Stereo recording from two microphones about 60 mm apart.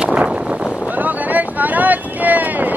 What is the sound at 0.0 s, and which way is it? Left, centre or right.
Boat, centre.